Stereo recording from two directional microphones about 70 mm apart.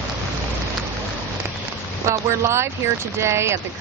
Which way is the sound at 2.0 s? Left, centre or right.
Right.